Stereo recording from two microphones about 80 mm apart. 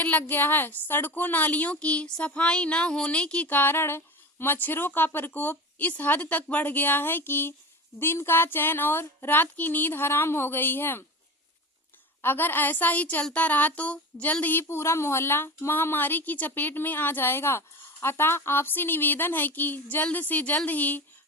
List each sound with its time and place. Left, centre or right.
0.0 s a woman's voice: left
12.2 s a woman's voice: left
14.4 s a woman's voice: left